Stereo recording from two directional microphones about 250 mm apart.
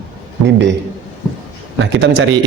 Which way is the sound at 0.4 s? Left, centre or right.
Right.